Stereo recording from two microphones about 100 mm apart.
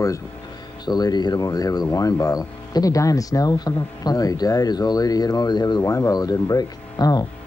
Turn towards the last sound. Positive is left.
turn(degrees=40)  # may be behind; listen again after turning